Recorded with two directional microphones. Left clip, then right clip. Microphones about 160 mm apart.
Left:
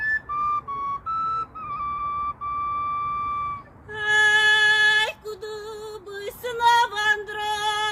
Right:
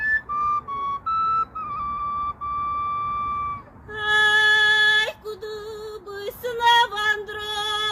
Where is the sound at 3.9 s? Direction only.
20° left (ahead or behind).